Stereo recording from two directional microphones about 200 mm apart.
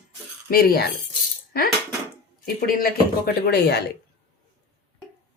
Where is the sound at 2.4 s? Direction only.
45° left (ahead or behind).